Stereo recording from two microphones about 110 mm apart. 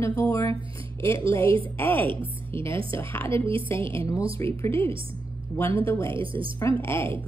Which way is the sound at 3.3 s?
55° right (ahead or behind).